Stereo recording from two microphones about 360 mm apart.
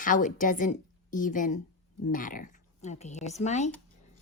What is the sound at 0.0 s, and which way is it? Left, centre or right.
A woman's voice, left.